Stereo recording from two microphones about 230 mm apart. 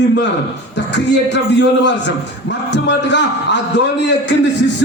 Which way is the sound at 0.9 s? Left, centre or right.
Left.